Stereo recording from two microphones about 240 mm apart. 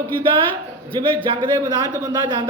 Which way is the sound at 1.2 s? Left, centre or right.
Centre.